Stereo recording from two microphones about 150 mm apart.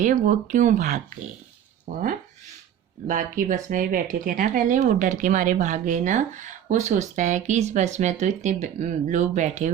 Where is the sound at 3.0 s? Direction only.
60° right (ahead or behind).